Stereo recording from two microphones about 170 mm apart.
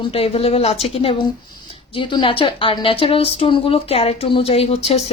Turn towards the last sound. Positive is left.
turn(degrees=40)  # may be behind; listen again after turning